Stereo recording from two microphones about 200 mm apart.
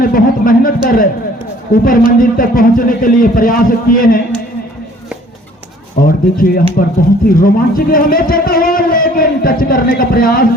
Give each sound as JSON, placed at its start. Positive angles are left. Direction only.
{"t": 0.0, "sound": "a man's voice", "side_deg": 45}
{"t": 6.0, "sound": "a man's voice", "side_deg": 45}